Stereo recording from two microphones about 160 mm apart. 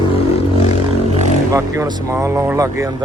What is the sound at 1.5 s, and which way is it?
Speech, 20° right (ahead or behind).